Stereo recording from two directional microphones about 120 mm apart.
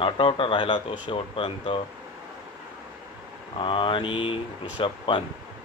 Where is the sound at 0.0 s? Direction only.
50° left (ahead or behind).